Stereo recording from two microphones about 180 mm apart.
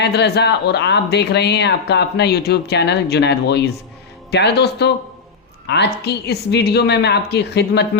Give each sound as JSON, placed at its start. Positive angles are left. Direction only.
{"t": 0.0, "sound": "speech", "side_deg": 65}